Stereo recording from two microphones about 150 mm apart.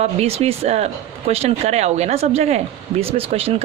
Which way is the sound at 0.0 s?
45° right (ahead or behind).